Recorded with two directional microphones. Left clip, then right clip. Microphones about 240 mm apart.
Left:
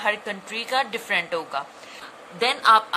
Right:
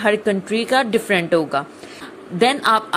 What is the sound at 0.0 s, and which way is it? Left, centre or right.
A woman's voice, right.